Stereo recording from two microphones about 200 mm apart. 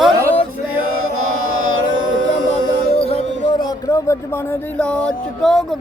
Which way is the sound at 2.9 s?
30° left (ahead or behind).